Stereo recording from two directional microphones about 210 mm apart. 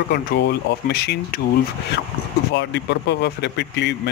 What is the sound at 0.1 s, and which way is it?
Speech, 50° left (ahead or behind).